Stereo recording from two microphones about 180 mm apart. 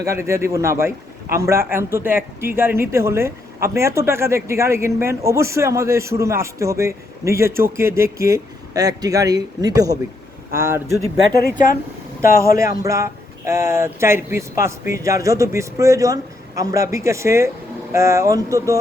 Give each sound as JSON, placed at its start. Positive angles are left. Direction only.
{"t": 0.0, "sound": "speech", "side_deg": -15}
{"t": 11.3, "sound": "speech", "side_deg": 55}
{"t": 12.5, "sound": "speech", "side_deg": -15}